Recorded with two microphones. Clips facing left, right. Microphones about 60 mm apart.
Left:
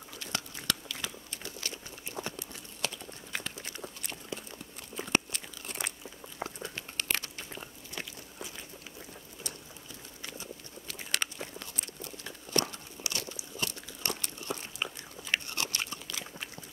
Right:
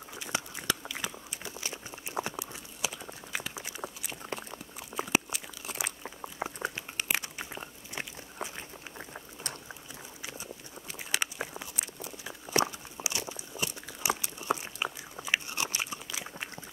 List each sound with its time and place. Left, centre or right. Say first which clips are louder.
0.1 s biting: right 3 dB; centre
2.2 s a sound: right 3 dB; centre
4.3 s a sound: right 3 dB; right
4.9 s crunch: right 1 dB; centre
6.4 s biting: right 3 dB; centre
8.4 s a sound: right 6 dB; right
8.9 s boiling: right 4 dB; right
10.2 s biting: even; centre
11.6 s crunch: right 2 dB; centre
14.0 s biting: right 6 dB; centre